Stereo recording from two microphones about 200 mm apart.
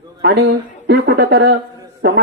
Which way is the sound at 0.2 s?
55° right (ahead or behind).